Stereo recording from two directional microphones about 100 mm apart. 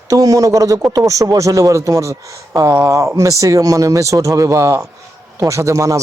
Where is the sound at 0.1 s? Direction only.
35° right (ahead or behind).